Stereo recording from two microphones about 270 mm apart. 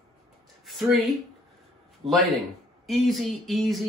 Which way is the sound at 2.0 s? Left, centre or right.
Centre.